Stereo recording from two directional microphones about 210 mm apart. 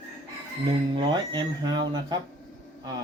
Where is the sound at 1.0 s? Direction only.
20° right (ahead or behind).